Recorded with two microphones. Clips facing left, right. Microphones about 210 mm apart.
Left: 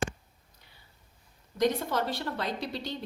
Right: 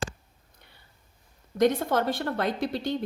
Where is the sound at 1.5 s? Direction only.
55° right (ahead or behind).